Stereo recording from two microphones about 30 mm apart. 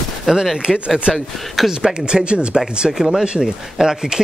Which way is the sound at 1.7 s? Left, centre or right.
Right.